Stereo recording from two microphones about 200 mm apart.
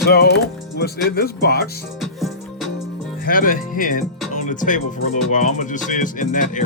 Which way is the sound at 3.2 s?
45° left (ahead or behind).